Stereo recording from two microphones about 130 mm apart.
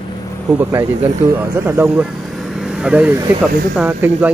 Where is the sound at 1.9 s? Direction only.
Centre (ahead or behind).